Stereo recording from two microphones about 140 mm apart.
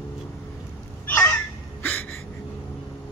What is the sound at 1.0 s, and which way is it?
Fowl, 15° left (ahead or behind).